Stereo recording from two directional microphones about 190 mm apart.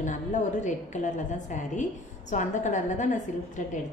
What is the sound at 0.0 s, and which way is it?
A woman's voice, 40° left (ahead or behind).